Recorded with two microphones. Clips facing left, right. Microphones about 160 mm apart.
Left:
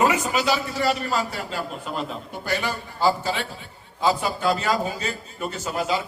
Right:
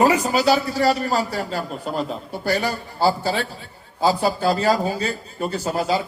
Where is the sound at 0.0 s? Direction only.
35° right (ahead or behind).